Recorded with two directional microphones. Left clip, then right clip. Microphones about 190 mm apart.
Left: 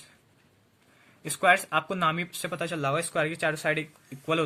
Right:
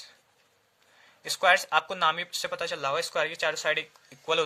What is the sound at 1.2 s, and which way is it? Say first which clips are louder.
Speech: even; 40° right (ahead or behind).